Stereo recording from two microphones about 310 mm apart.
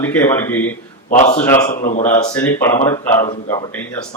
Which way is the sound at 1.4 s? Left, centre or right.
Centre.